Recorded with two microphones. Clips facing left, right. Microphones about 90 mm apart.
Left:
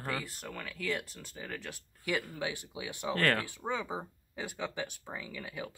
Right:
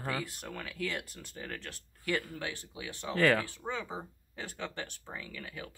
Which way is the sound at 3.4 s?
15° left (ahead or behind).